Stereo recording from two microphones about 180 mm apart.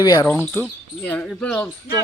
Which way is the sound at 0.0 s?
20° left (ahead or behind).